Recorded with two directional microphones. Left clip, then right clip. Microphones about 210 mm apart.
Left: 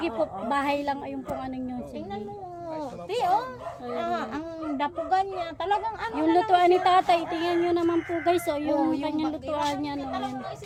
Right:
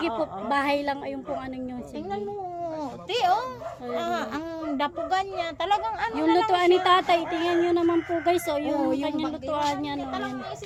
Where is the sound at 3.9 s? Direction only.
25° right (ahead or behind); by 6.1 s 45° right (ahead or behind).